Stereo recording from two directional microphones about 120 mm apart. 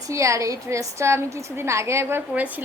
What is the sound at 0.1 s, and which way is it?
A woman's voice, 25° right (ahead or behind).